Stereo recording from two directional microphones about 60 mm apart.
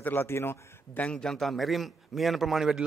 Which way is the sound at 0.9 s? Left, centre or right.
Centre.